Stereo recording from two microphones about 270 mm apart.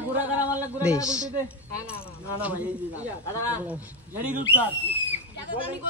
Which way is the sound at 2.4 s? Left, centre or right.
Centre.